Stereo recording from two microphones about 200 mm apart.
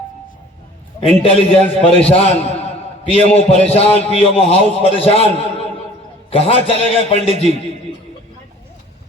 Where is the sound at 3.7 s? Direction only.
30° left (ahead or behind).